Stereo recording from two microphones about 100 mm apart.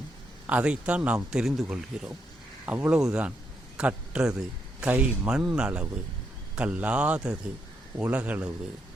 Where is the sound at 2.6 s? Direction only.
15° right (ahead or behind).